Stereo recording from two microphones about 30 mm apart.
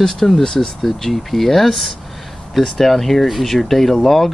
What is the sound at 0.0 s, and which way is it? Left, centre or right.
Speech, centre.